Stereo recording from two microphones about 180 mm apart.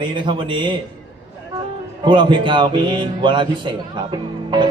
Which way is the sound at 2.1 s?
25° right (ahead or behind).